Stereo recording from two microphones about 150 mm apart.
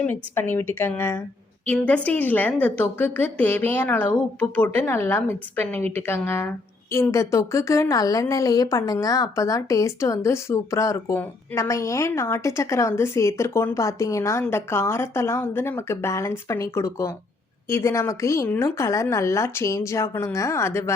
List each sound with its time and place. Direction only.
0.0 s a woman's voice: 15° left (ahead or behind)